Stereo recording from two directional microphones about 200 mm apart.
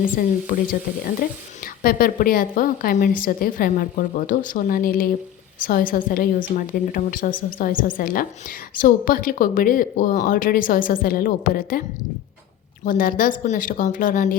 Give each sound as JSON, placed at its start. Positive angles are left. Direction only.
{"t": 0.0, "sound": "a woman's voice", "side_deg": 45}
{"t": 12.8, "sound": "speech", "side_deg": 45}